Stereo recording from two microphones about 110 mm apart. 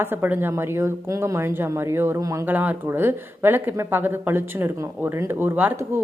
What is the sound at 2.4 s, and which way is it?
Speech, 15° right (ahead or behind).